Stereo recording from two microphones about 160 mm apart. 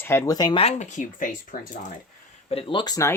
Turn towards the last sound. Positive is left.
turn(degrees=20)  # may be behind; listen again after turning